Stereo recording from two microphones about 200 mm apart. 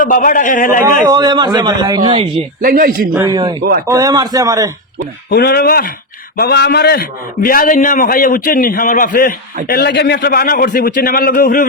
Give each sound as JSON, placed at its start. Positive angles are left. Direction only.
{"t": 0.0, "sound": "a man's voice", "side_deg": 40}
{"t": 1.0, "sound": "a man's voice", "side_deg": -20}
{"t": 2.6, "sound": "speech", "side_deg": -45}
{"t": 3.2, "sound": "a man's voice", "side_deg": -20}
{"t": 3.6, "sound": "speech", "side_deg": -50}
{"t": 3.8, "sound": "a man's voice", "side_deg": -15}
{"t": 5.3, "sound": "a man's voice", "side_deg": 50}